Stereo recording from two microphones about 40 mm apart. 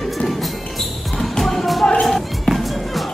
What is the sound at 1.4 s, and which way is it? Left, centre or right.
Music, centre.